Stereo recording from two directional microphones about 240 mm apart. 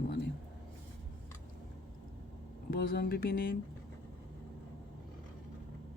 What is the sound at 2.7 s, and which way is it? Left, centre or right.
Speech, left.